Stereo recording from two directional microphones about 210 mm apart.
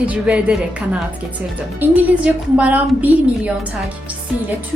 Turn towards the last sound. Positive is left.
turn(degrees=-10)  # may be behind; listen again after turning